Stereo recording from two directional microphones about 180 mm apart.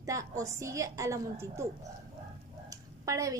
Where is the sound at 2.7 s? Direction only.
20° right (ahead or behind).